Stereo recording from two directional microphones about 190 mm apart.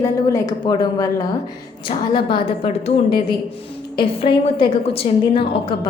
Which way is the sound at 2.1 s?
25° left (ahead or behind).